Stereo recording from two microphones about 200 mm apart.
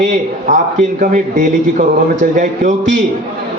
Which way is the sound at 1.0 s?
40° right (ahead or behind).